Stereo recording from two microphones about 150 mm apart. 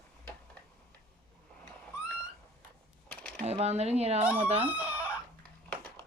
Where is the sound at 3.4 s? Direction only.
45° right (ahead or behind).